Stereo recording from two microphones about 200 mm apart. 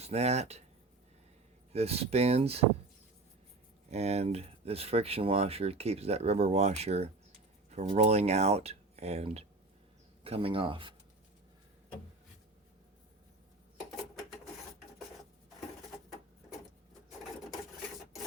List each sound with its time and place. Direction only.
0.0 s speech: 30° right (ahead or behind)
1.7 s speech: 30° right (ahead or behind)
3.8 s speech: 35° right (ahead or behind)